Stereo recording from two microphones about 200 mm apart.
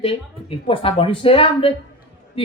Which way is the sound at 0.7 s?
25° left (ahead or behind).